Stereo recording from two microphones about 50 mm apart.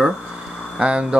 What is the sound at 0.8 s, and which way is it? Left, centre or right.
Speech, centre.